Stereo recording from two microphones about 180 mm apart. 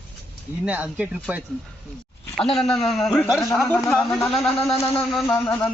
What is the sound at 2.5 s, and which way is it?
A man's voice, centre (ahead or behind).